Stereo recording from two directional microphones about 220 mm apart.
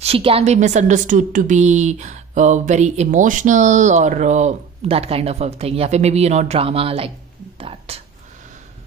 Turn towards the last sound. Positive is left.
turn(degrees=-25)  # may be behind; listen again after turning